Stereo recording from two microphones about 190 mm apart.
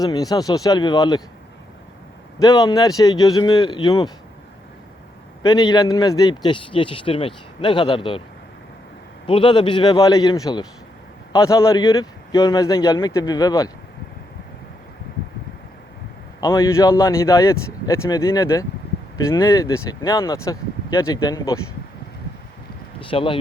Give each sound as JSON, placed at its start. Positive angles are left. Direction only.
{"t": 0.0, "sound": "speech", "side_deg": 20}
{"t": 2.4, "sound": "speech", "side_deg": 20}
{"t": 5.5, "sound": "speech", "side_deg": 20}
{"t": 9.2, "sound": "speech", "side_deg": 25}
{"t": 16.4, "sound": "speech", "side_deg": 15}
{"t": 23.0, "sound": "speech", "side_deg": 30}